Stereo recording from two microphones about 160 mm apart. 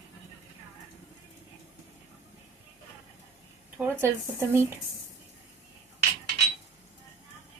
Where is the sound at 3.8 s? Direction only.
15° right (ahead or behind).